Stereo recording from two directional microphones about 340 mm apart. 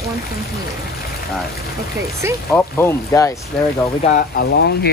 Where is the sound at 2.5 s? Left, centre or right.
Centre.